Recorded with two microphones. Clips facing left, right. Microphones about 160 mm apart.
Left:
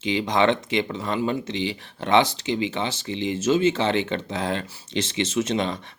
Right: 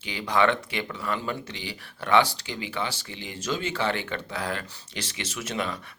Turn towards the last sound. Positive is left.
turn(degrees=30)  # may be behind; listen again after turning